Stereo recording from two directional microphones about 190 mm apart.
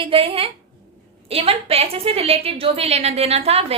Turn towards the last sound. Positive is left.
turn(degrees=-30)  # may be behind; listen again after turning